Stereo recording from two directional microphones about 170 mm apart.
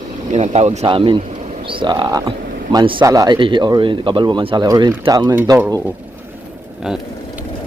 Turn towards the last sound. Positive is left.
turn(degrees=-10)  # may be behind; listen again after turning